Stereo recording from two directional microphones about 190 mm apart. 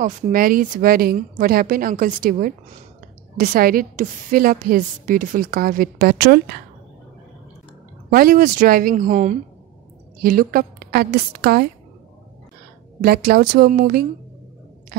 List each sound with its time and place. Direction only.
0.0 s a woman's voice: 50° right (ahead or behind)
8.1 s a woman's voice: 50° right (ahead or behind)
13.0 s a woman's voice: 50° right (ahead or behind)